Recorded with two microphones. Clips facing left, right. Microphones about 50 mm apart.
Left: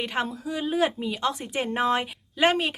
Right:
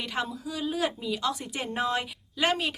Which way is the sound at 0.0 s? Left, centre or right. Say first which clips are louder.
Left 4 dB; left.